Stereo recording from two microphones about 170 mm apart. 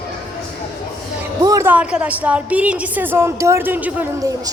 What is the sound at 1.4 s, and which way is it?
A woman's voice, 15° right (ahead or behind).